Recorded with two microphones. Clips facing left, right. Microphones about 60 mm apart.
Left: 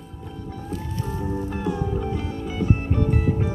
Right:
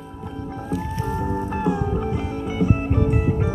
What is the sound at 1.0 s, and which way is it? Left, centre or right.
Music, right.